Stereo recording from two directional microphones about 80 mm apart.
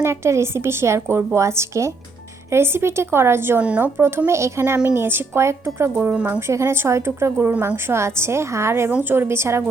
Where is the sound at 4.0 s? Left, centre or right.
Right.